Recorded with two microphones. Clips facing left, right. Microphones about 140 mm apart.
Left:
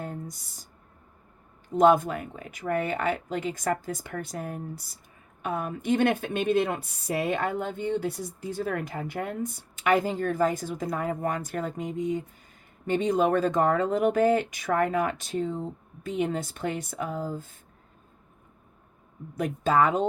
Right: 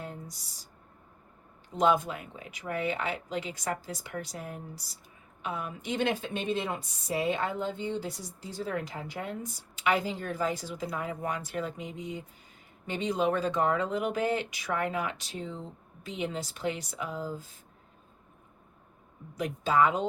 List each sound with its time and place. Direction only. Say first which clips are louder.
0.0 s a sound: left 5 dB; 50° left (ahead or behind)
1.7 s a woman's voice: left 6 dB; 45° left (ahead or behind)
19.4 s a woman's voice: left 2 dB; 45° left (ahead or behind)